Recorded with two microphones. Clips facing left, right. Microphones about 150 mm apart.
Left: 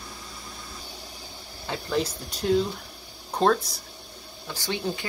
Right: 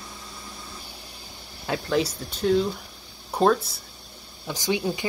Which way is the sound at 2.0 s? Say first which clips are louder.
Right 2 dB; centre (ahead or behind).